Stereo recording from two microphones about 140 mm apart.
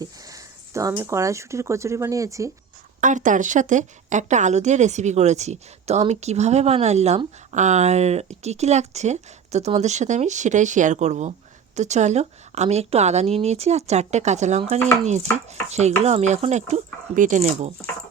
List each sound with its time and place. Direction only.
0.0 s speech: 25° right (ahead or behind)
3.0 s a woman's voice: 65° right (ahead or behind)
15.7 s speech: 55° right (ahead or behind)